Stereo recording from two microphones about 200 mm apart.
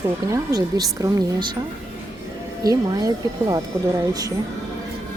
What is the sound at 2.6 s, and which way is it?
A woman's voice, 20° right (ahead or behind).